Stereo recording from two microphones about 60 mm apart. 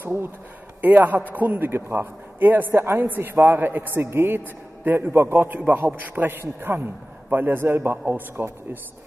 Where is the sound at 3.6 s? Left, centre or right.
Right.